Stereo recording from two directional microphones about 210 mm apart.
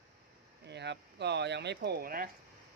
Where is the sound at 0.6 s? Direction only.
55° right (ahead or behind).